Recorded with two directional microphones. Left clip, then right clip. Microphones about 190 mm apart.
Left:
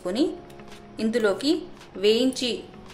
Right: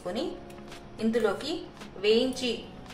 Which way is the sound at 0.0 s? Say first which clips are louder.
Left 7 dB; 65° left (ahead or behind).